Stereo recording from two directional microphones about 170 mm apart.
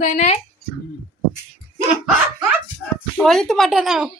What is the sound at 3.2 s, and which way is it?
Speech, centre (ahead or behind).